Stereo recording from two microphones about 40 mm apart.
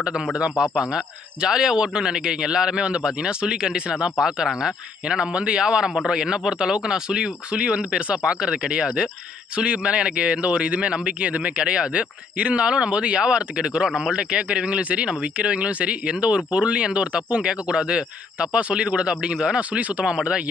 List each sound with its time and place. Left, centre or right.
0.0 s speech: right
13.8 s a man's voice: centre
14.1 s speech: right
19.7 s speech: right